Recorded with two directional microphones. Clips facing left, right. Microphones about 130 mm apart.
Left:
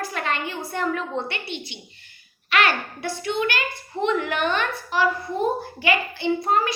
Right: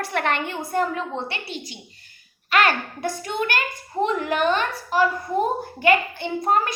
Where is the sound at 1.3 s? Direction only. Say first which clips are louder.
Even; 35° right (ahead or behind).